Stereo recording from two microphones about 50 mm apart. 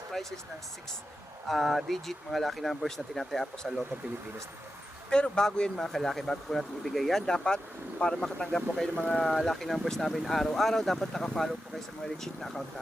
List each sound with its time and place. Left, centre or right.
0.1 s a sound: centre
1.5 s speech: centre
5.1 s speech: centre
9.2 s speech: centre